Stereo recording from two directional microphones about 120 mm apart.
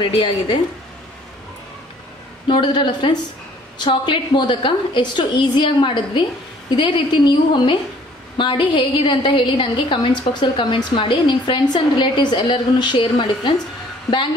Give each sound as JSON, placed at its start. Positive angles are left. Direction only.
{"t": 0.0, "sound": "a woman's voice", "side_deg": 40}
{"t": 2.4, "sound": "a woman's voice", "side_deg": 40}